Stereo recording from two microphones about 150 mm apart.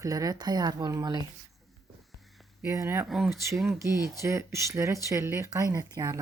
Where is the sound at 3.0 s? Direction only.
Centre (ahead or behind).